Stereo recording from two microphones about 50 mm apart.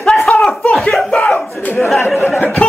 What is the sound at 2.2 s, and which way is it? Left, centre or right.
Speech, left.